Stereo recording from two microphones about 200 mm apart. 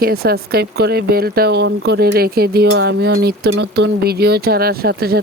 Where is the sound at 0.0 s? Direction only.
50° right (ahead or behind).